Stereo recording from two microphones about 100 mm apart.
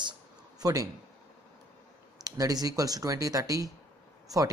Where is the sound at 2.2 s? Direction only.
40° right (ahead or behind).